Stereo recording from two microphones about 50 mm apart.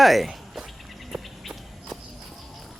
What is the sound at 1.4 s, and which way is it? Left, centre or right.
Walk, centre.